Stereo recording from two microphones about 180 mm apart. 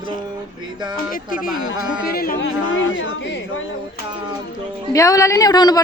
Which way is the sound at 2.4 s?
90° left.